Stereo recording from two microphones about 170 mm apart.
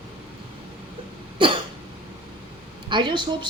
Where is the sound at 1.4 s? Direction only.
30° right (ahead or behind).